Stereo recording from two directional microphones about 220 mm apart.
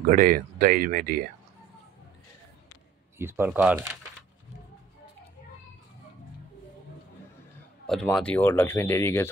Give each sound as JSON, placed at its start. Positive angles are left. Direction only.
{"t": 0.0, "sound": "speech", "side_deg": -40}
{"t": 3.2, "sound": "speech", "side_deg": -10}
{"t": 7.8, "sound": "a man's voice", "side_deg": 0}